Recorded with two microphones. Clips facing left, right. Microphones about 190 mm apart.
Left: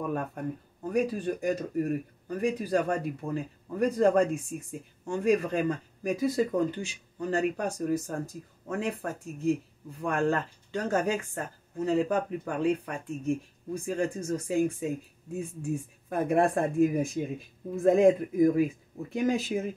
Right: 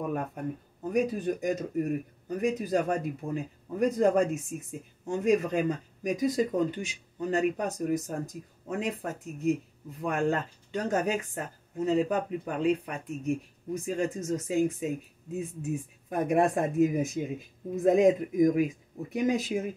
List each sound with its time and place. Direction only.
0.1 s speech: 15° right (ahead or behind)